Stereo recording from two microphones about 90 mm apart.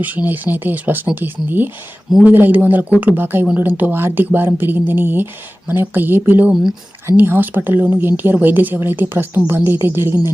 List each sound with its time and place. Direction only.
0.3 s speech: 20° right (ahead or behind)